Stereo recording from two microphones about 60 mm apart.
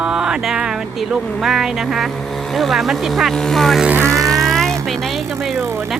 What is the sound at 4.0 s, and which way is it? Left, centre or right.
Vehicle, right.